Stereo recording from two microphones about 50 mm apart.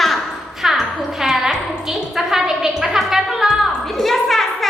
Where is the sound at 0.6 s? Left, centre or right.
Centre.